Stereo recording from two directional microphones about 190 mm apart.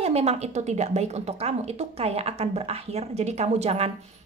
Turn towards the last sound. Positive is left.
turn(degrees=-35)  # may be behind; listen again after turning